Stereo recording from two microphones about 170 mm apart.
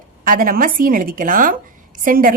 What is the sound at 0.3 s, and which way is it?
A woman's voice, 55° right (ahead or behind).